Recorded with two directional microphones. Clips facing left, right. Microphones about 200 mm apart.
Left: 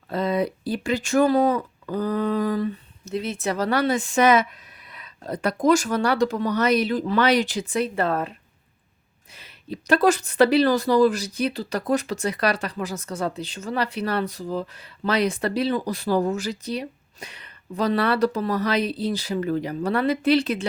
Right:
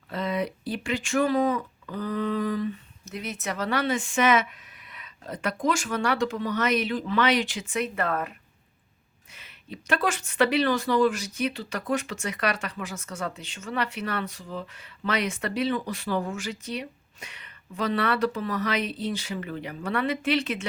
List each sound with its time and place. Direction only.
0.1 s speech: 35° left (ahead or behind)
9.3 s speech: 35° left (ahead or behind)